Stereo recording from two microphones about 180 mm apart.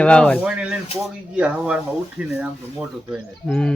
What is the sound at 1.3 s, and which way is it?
Speech, 5° right (ahead or behind).